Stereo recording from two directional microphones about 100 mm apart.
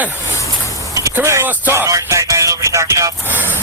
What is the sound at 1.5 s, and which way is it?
Music, 20° right (ahead or behind).